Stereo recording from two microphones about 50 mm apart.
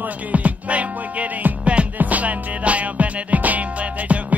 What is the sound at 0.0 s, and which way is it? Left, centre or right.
Music, right.